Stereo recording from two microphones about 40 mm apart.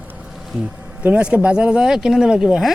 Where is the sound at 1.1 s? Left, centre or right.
Right.